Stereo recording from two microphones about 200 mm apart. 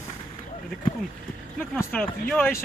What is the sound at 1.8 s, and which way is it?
Speech, 10° left (ahead or behind).